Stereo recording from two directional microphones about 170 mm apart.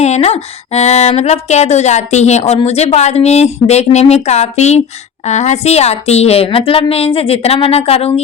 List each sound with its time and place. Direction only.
0.0 s speech: 40° left (ahead or behind)